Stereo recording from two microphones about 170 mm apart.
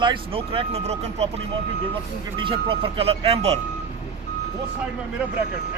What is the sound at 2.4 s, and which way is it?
Speech, 30° right (ahead or behind).